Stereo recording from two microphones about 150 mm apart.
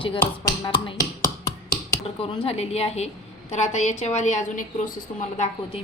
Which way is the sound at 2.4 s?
40° left (ahead or behind).